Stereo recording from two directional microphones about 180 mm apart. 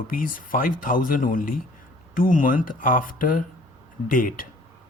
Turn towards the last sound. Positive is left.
turn(degrees=50)  # may be behind; listen again after turning